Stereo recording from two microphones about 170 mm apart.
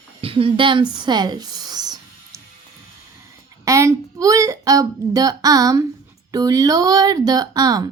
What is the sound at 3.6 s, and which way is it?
Speech, 20° right (ahead or behind).